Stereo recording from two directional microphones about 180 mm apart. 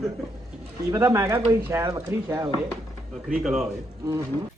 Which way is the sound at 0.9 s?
15° right (ahead or behind).